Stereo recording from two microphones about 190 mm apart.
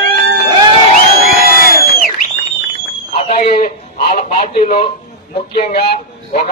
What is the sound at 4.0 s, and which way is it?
Speech, 35° left (ahead or behind).